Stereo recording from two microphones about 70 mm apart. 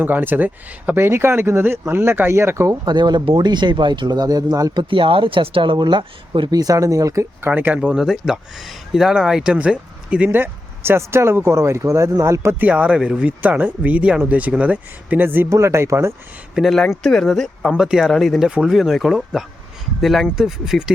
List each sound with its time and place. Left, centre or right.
0.0 s speech: right
2.6 s speech: right
5.4 s speech: right
6.5 s speech: right
7.4 s speech: right
7.8 s speech: centre
10.2 s speech: right
12.5 s speech: right
15.4 s speech: right
16.6 s speech: centre
17.7 s speech: centre